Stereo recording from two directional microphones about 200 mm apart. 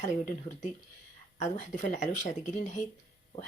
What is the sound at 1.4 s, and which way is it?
A woman's voice, 40° left (ahead or behind).